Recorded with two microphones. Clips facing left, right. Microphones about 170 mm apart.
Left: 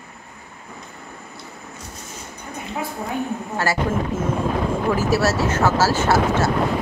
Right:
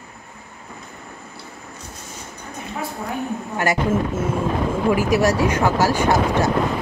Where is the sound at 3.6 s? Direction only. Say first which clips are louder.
Right 3 dB; 20° right (ahead or behind).